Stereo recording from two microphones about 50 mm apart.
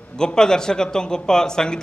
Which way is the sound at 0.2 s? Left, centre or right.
Centre.